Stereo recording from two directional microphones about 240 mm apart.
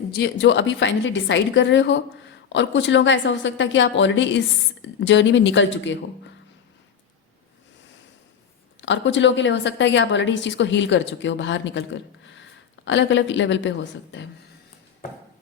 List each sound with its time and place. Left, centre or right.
0.1 s a woman's voice: left
8.8 s a woman's voice: left